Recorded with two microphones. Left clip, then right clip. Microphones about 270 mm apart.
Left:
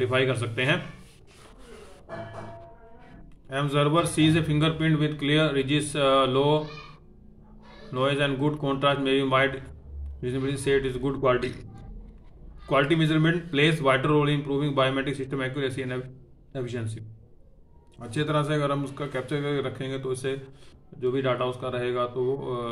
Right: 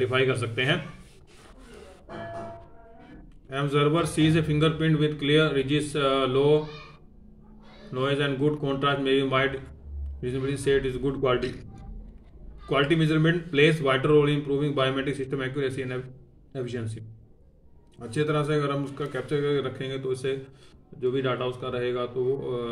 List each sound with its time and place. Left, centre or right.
0.0 s speech: centre
3.4 s speech: centre
7.9 s speech: centre
12.6 s speech: centre